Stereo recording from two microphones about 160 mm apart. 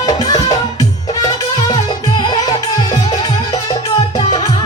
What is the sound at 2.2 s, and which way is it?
Music, 25° left (ahead or behind).